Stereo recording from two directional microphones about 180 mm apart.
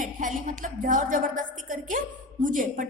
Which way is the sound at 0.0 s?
45° right (ahead or behind).